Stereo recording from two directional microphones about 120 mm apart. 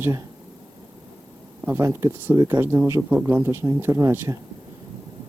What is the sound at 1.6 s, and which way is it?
Speech, 20° right (ahead or behind).